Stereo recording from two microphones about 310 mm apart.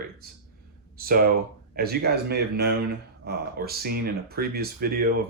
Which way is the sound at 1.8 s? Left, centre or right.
Right.